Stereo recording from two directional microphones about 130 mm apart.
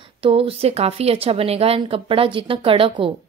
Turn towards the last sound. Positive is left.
turn(degrees=-45)  # may be behind; listen again after turning